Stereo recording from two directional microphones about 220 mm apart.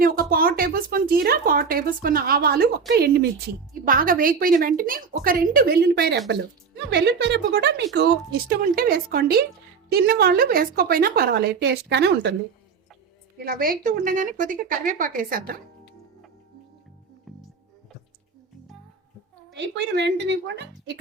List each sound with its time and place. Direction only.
0.0 s a woman's voice: 40° right (ahead or behind)
13.4 s speech: 40° right (ahead or behind)
19.5 s a woman's voice: 50° right (ahead or behind)